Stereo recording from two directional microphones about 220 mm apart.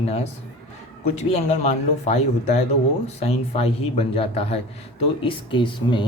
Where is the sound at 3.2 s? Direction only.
25° left (ahead or behind).